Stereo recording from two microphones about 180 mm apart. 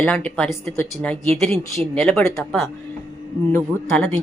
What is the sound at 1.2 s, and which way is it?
Speech, 35° right (ahead or behind).